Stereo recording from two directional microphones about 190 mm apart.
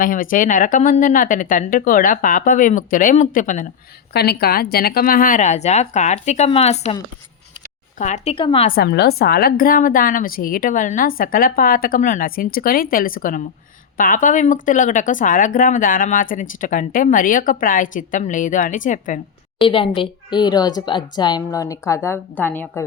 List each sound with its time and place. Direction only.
0.0 s speech: 45° left (ahead or behind)
4.1 s a woman's voice: 55° left (ahead or behind); by 6.9 s 35° left (ahead or behind)
7.9 s a woman's voice: 40° left (ahead or behind)
8.7 s speech: 55° left (ahead or behind)
19.5 s speech: 25° left (ahead or behind); by 22.9 s 10° left (ahead or behind)